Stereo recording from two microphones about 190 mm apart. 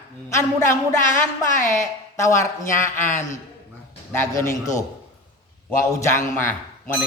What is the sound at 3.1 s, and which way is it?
Speech, 40° left (ahead or behind).